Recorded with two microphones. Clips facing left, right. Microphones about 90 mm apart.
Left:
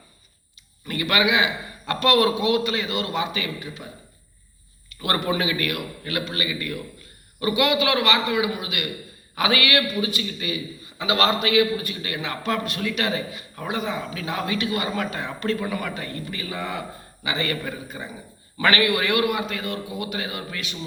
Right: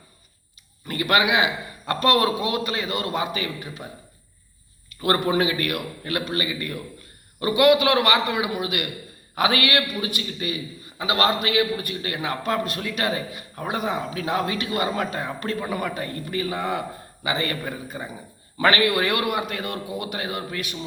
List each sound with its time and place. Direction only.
0.9 s speech: 45° right (ahead or behind)
1.9 s a man's voice: 35° right (ahead or behind)
5.0 s a man's voice: 40° right (ahead or behind)
10.9 s a man's voice: 40° right (ahead or behind)